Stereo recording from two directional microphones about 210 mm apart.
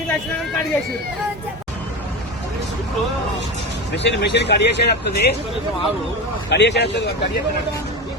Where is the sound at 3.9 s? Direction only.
55° left (ahead or behind).